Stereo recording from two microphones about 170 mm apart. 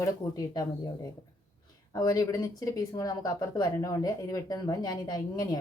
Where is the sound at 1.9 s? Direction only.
20° left (ahead or behind).